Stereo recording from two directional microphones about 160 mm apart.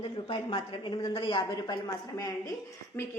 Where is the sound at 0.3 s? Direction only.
30° left (ahead or behind).